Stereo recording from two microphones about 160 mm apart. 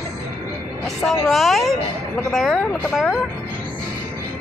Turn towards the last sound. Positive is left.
turn(degrees=5)  # may be behind; listen again after turning